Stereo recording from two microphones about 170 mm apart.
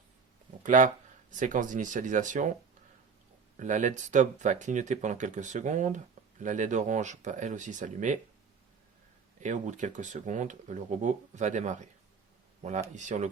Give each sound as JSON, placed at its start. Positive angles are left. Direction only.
{"t": 0.6, "sound": "speech", "side_deg": -50}
{"t": 3.6, "sound": "speech", "side_deg": -45}
{"t": 9.4, "sound": "speech", "side_deg": -45}
{"t": 12.9, "sound": "speech", "side_deg": -45}